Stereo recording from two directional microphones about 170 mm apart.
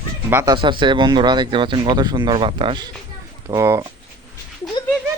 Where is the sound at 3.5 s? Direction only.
15° right (ahead or behind).